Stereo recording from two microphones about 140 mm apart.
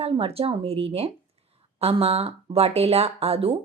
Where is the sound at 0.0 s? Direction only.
45° right (ahead or behind).